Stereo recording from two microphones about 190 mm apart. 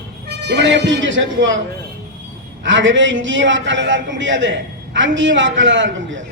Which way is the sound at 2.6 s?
75° right (ahead or behind).